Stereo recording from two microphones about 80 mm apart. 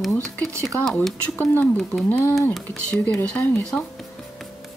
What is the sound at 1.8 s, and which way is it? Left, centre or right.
Speech, centre.